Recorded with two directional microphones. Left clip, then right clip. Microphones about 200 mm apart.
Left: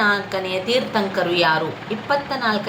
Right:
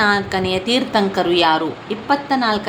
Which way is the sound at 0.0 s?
45° right (ahead or behind).